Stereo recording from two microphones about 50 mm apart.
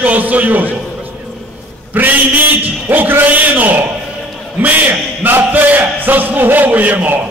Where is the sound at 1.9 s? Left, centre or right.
Right.